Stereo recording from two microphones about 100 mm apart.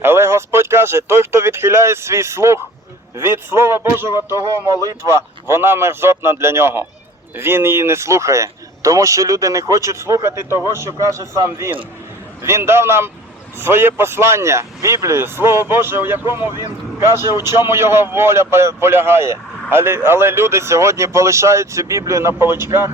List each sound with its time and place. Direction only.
0.0 s speech: 25° right (ahead or behind)